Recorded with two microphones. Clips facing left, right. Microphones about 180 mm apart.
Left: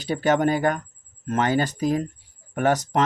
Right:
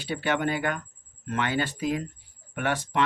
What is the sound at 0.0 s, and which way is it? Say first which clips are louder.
Speech: left 6 dB; 40° left (ahead or behind).